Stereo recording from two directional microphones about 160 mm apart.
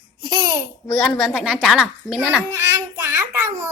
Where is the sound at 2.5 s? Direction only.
15° right (ahead or behind).